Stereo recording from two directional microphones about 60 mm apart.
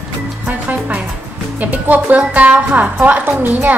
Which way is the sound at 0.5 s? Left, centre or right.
Right.